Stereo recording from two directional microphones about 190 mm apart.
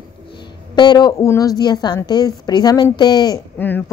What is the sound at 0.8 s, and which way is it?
A woman's voice, 20° left (ahead or behind).